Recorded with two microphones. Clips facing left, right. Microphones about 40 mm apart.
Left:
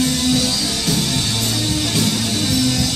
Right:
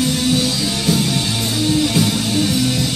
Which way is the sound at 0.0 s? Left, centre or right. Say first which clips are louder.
Right 1 dB; centre.